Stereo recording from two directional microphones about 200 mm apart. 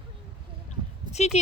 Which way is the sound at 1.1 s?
35° left (ahead or behind).